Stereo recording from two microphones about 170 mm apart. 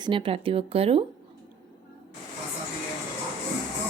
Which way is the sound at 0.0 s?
30° right (ahead or behind).